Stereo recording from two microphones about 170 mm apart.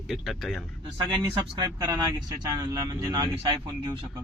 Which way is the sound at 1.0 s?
25° right (ahead or behind).